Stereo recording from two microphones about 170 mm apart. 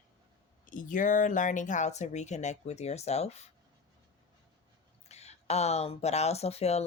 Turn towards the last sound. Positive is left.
turn(degrees=40)  # may be behind; listen again after turning